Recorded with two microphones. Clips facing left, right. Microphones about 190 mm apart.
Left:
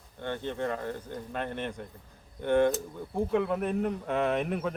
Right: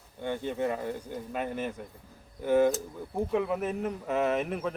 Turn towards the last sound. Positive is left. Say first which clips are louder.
# even
turn(degrees=0)  # may be behind; listen again after turning